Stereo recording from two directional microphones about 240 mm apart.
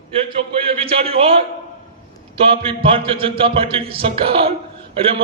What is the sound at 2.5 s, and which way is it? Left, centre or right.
A man's voice, right.